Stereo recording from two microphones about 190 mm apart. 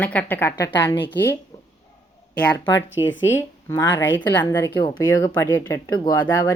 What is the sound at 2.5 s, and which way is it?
Speech, 15° left (ahead or behind).